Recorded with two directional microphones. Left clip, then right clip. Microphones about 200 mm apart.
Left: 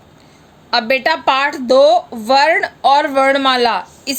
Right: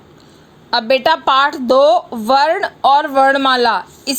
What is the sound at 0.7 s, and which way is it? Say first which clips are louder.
A woman's voice: right 1 dB; 15° right (ahead or behind).